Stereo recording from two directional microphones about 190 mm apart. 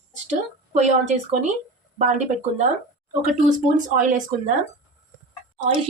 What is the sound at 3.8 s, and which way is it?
Speech, 40° right (ahead or behind).